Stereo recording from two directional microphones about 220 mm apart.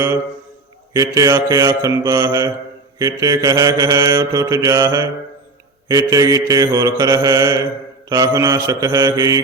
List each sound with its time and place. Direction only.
0.9 s mantra: 15° right (ahead or behind)